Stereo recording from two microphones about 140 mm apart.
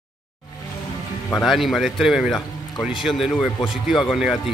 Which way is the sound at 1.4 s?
Centre (ahead or behind).